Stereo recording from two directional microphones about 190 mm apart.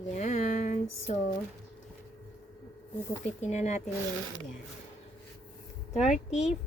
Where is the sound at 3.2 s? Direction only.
35° left (ahead or behind).